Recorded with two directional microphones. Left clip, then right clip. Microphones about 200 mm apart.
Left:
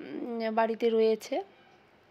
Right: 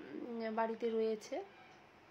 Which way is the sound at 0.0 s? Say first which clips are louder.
Left 9 dB; 40° left (ahead or behind).